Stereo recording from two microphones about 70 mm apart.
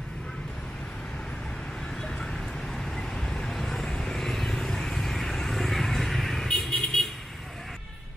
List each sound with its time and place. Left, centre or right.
2.0 s vehicle: centre